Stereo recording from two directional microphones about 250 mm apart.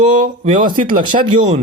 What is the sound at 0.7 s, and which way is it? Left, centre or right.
Speech, right.